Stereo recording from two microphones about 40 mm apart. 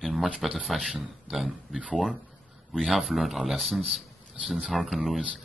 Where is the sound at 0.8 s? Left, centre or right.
Centre.